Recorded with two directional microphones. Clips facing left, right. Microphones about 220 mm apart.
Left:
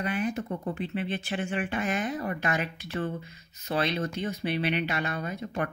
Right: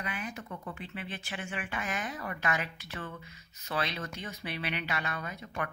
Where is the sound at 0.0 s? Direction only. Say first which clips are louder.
Left 10 dB; 35° left (ahead or behind).